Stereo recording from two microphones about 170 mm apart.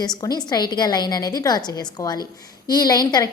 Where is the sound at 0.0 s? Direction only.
25° left (ahead or behind).